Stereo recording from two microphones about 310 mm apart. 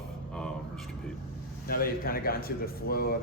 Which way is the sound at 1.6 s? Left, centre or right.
Left.